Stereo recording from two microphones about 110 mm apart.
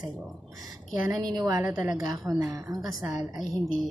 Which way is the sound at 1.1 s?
40° right (ahead or behind).